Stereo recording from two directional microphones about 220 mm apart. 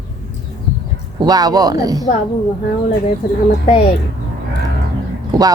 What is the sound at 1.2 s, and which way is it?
Speech, 15° right (ahead or behind).